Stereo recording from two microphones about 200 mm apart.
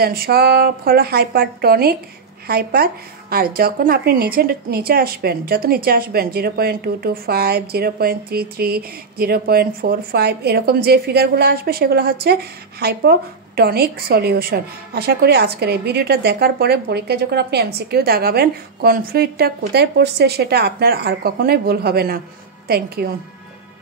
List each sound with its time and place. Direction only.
0.0 s a woman's voice: 50° right (ahead or behind)